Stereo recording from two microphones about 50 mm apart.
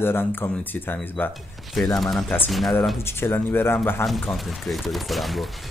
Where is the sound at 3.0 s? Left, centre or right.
Left.